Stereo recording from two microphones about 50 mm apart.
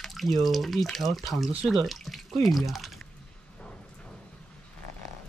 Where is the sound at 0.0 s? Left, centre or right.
Centre.